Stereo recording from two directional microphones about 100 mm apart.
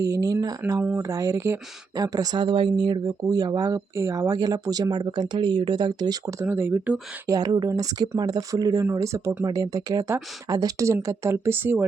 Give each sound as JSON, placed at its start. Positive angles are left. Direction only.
{"t": 0.0, "sound": "speech", "side_deg": -35}
{"t": 6.4, "sound": "speech", "side_deg": -20}
{"t": 7.3, "sound": "speech", "side_deg": -40}